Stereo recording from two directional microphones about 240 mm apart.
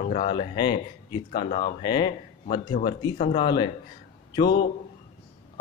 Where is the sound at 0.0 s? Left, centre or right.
Left.